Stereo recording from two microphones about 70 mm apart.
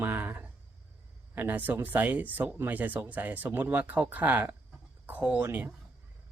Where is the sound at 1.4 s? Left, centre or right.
Right.